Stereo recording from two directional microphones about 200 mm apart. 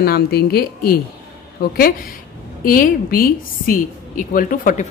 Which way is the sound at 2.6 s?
45° left (ahead or behind).